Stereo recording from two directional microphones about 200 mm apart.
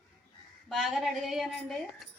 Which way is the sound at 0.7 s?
Centre (ahead or behind).